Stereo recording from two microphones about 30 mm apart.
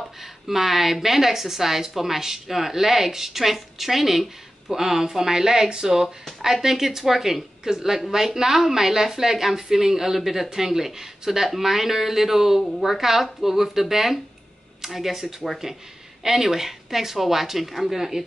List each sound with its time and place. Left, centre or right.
0.2 s speech: centre